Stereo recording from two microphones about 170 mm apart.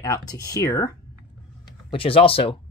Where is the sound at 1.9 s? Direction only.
30° left (ahead or behind).